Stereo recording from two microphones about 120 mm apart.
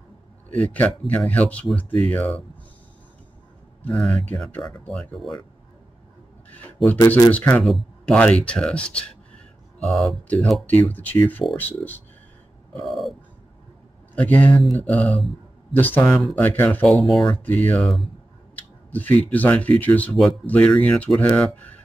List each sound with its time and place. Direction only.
0.7 s speech: 15° left (ahead or behind)
3.9 s speech: 5° left (ahead or behind)
7.2 s speech: 15° left (ahead or behind)
10.2 s speech: 10° left (ahead or behind)
12.8 s speech: centre (ahead or behind)
14.1 s speech: 15° left (ahead or behind)
14.6 s speech: centre (ahead or behind)
14.9 s speech: 15° left (ahead or behind)
17.0 s speech: centre (ahead or behind)
17.5 s speech: 10° left (ahead or behind)
18.6 s a sound: 15° left (ahead or behind)
19.3 s speech: 15° left (ahead or behind)